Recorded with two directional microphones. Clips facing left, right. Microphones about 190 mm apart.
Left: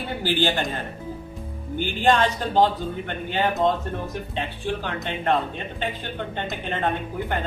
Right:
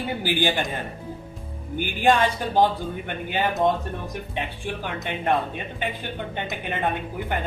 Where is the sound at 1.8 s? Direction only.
10° right (ahead or behind).